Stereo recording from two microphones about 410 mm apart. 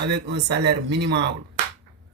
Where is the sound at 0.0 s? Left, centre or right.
Right.